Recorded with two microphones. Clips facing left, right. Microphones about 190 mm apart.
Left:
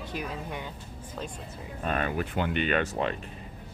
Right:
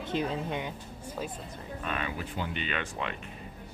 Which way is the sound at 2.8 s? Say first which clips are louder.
Left 7 dB; 40° left (ahead or behind).